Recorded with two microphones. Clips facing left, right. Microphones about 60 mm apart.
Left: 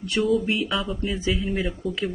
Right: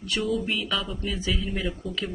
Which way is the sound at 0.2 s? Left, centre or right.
Centre.